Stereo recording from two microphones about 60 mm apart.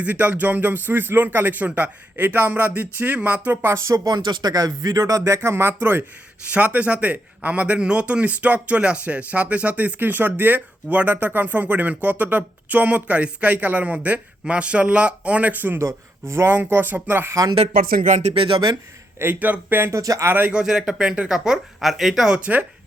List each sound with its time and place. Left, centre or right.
0.0 s speech: right
3.7 s speech: right
5.8 s speech: right
6.5 s speech: right
19.2 s speech: right
20.0 s speech: right
20.2 s speech: right
20.5 s speech: centre